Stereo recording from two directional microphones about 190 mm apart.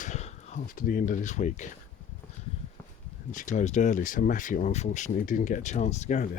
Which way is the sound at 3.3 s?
40° left (ahead or behind).